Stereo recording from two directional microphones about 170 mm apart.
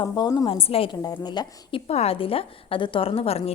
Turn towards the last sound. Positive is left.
turn(degrees=35)  # may be behind; listen again after turning